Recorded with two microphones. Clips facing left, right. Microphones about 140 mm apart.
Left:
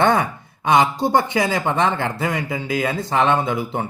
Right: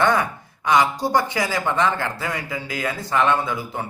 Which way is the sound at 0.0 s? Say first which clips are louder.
Left 2 dB; 25° left (ahead or behind).